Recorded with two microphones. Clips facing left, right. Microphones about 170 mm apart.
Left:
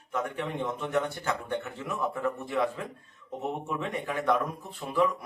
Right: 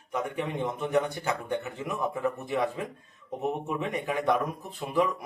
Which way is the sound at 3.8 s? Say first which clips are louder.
Right 2 dB; 15° right (ahead or behind).